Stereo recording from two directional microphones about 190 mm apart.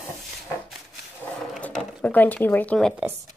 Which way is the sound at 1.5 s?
5° left (ahead or behind).